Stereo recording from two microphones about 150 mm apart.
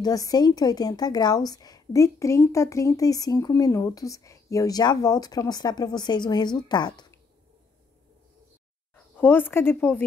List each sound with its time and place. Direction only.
0.0 s a woman's voice: 25° left (ahead or behind)
8.9 s speech: 10° left (ahead or behind)